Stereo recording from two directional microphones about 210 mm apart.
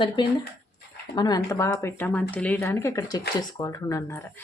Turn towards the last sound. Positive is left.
turn(degrees=15)  # may be behind; listen again after turning